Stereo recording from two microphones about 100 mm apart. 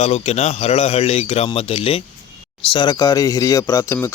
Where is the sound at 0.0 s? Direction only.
90° left; by 2.0 s 70° left (ahead or behind).